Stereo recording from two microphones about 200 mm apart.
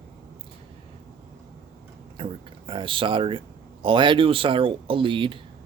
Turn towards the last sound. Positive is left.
turn(degrees=-25)  # may be behind; listen again after turning